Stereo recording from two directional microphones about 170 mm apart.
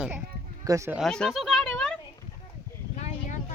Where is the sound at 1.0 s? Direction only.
5° left (ahead or behind).